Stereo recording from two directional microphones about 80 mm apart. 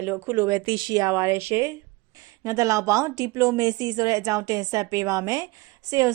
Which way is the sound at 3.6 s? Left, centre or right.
Right.